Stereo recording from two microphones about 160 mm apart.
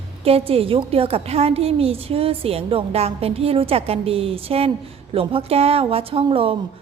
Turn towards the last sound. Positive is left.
turn(degrees=-35)  # may be behind; listen again after turning